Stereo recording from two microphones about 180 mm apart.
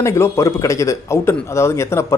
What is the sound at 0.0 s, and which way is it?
Speech, 15° left (ahead or behind).